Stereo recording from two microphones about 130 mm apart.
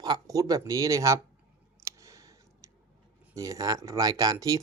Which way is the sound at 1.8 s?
25° right (ahead or behind).